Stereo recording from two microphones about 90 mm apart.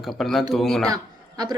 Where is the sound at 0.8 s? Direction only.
45° right (ahead or behind).